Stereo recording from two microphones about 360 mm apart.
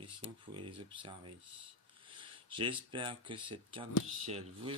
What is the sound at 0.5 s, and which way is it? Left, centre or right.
Speech, centre.